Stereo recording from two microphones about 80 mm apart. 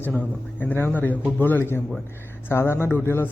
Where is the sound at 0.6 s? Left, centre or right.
Left.